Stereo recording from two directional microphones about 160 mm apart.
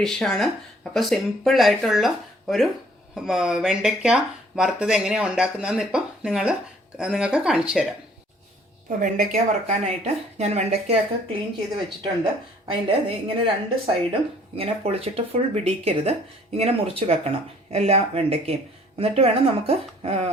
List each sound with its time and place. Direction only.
0.0 s speech: 5° left (ahead or behind)
9.0 s a woman's voice: 55° right (ahead or behind); by 10.9 s 40° right (ahead or behind)
12.6 s a woman's voice: 35° right (ahead or behind)